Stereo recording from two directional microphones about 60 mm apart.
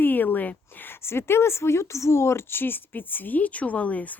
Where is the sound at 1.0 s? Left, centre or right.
Left.